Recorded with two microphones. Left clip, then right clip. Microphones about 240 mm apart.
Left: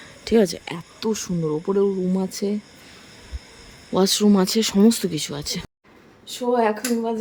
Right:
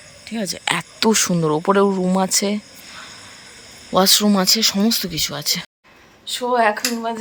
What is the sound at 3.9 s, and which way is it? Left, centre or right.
Speech, centre.